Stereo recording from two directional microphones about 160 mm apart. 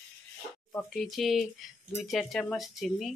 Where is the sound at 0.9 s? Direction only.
Centre (ahead or behind).